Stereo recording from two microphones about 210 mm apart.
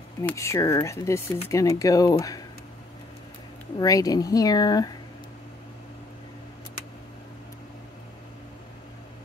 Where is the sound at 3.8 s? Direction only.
15° left (ahead or behind).